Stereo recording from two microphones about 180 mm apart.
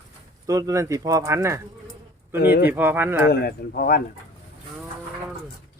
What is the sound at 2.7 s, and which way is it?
Speech, 10° right (ahead or behind).